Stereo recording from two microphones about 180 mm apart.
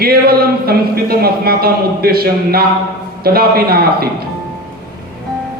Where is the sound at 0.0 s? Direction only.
60° right (ahead or behind).